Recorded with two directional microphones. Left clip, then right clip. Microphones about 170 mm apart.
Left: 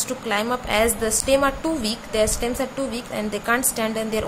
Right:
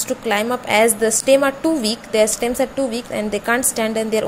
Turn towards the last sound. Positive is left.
turn(degrees=-25)  # may be behind; listen again after turning